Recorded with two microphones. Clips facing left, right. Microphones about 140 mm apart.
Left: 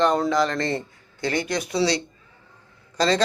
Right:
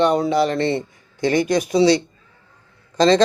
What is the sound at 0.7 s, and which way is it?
A man's voice, 10° right (ahead or behind).